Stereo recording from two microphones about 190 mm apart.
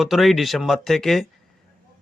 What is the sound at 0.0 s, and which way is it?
Speech, centre (ahead or behind).